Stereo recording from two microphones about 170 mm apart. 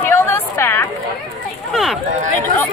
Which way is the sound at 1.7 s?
Centre (ahead or behind).